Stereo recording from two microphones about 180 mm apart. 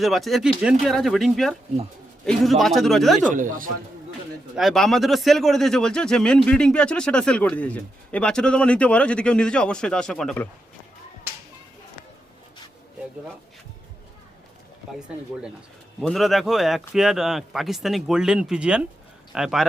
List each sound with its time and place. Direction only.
0.0 s a man's voice: centre (ahead or behind)
3.2 s speech: 45° right (ahead or behind)
4.5 s a man's voice: centre (ahead or behind)
14.9 s a man's voice: 5° right (ahead or behind)